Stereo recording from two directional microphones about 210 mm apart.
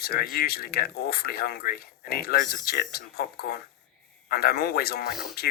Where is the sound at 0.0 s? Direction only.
45° left (ahead or behind).